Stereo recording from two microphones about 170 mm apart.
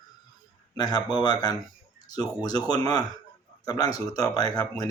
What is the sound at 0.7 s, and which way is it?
Speech, 20° left (ahead or behind).